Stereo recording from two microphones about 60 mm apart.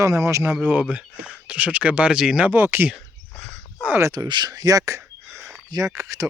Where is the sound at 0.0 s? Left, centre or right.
Right.